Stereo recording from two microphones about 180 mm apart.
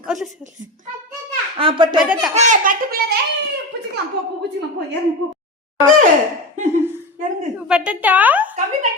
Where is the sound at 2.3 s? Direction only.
40° right (ahead or behind).